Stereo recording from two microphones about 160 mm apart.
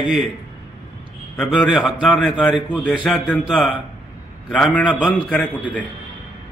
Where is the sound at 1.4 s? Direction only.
Centre (ahead or behind).